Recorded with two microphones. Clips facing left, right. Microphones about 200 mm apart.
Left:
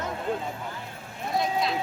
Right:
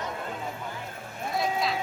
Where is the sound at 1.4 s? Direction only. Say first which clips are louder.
Left 1 dB; centre (ahead or behind).